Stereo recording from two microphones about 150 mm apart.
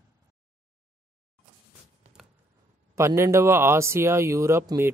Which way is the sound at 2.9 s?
20° right (ahead or behind).